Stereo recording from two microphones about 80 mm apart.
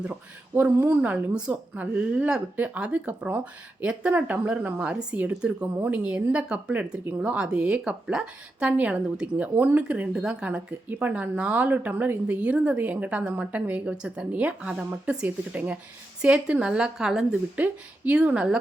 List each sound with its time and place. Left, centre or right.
0.0 s a woman's voice: centre